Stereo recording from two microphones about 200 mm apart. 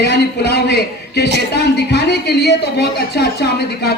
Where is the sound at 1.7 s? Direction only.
55° left (ahead or behind).